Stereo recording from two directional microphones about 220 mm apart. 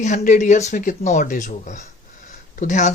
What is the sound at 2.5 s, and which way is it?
Speech, 35° left (ahead or behind).